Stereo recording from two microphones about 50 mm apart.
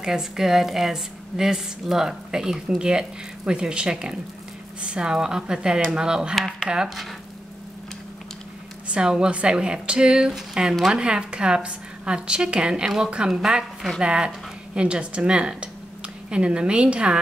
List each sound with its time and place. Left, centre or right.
0.0 s a woman's voice: centre
8.8 s a woman's voice: centre